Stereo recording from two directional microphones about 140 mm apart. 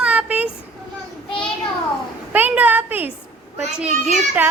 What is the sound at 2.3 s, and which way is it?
Speech, 10° right (ahead or behind).